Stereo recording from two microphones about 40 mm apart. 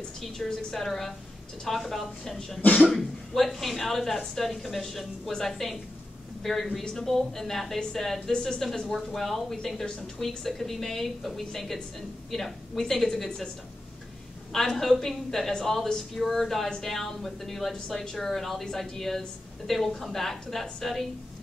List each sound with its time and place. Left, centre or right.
0.5 s speech: centre
0.7 s a woman's voice: centre
6.8 s speech: centre
8.3 s speech: centre
9.1 s a woman's voice: centre
14.5 s a woman's voice: centre